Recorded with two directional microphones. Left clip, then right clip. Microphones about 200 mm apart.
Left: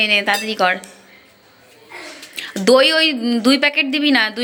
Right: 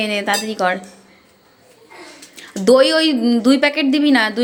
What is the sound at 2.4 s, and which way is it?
A woman's voice, 15° right (ahead or behind).